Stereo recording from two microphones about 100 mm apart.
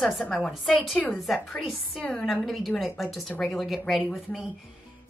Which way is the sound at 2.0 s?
10° left (ahead or behind).